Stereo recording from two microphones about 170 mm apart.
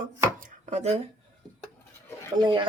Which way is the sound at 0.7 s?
40° right (ahead or behind).